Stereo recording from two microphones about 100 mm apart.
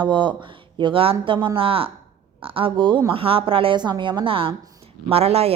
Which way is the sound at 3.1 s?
65° right (ahead or behind).